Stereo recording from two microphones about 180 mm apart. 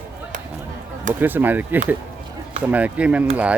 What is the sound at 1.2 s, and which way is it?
Speech, 10° right (ahead or behind).